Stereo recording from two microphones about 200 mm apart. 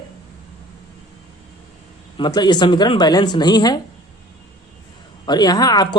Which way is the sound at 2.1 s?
20° left (ahead or behind).